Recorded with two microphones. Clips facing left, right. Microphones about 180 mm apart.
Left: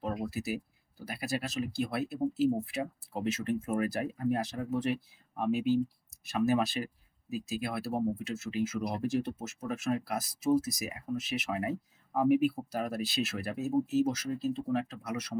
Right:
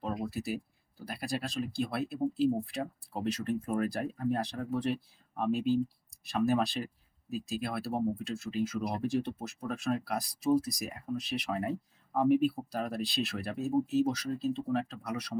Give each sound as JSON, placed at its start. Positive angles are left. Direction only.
{"t": 0.0, "sound": "speech", "side_deg": 5}